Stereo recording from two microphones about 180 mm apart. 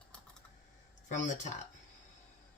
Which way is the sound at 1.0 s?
40° left (ahead or behind).